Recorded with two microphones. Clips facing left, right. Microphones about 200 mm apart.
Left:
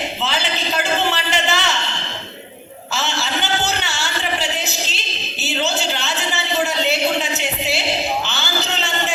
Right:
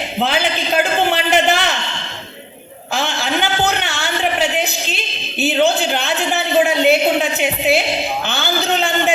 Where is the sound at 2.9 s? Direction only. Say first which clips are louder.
Right 4 dB; 55° right (ahead or behind).